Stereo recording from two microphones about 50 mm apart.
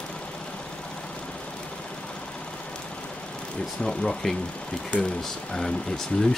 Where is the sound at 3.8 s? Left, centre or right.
Centre.